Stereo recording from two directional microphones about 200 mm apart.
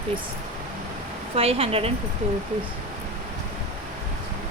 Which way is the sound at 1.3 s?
30° right (ahead or behind).